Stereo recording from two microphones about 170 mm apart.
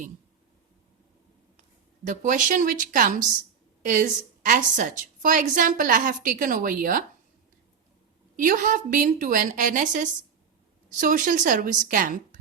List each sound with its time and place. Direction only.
2.0 s a woman's voice: 50° right (ahead or behind)
8.4 s a woman's voice: 50° right (ahead or behind)